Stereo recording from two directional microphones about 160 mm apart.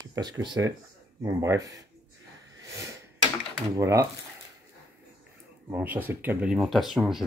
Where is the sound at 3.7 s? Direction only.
20° right (ahead or behind).